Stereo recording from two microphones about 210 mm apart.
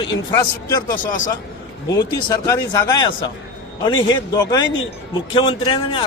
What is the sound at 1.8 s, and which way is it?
Speech, 15° left (ahead or behind).